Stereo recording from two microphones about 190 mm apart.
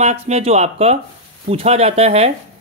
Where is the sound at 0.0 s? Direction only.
35° right (ahead or behind).